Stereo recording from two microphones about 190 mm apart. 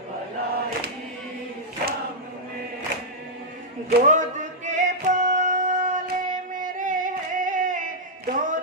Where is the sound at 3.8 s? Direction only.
40° right (ahead or behind).